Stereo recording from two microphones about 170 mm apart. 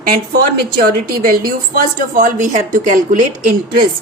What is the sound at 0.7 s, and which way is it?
A woman's voice, 60° right (ahead or behind).